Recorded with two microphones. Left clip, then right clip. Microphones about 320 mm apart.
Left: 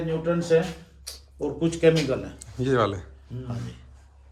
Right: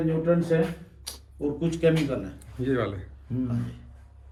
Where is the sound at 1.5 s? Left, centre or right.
Left.